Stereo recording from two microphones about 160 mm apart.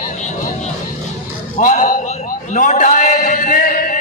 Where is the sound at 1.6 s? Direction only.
55° left (ahead or behind).